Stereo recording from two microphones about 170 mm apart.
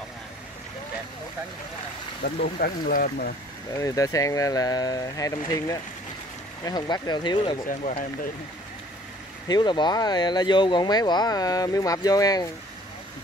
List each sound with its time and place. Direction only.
2.2 s speech: 60° left (ahead or behind)
3.7 s speech: 20° left (ahead or behind)
7.6 s speech: 50° left (ahead or behind)
9.5 s speech: 25° left (ahead or behind)